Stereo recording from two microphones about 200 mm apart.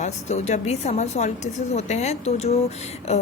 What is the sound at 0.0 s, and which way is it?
Speech, 35° left (ahead or behind).